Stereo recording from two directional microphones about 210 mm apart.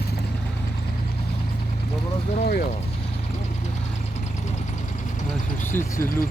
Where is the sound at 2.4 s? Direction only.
45° left (ahead or behind).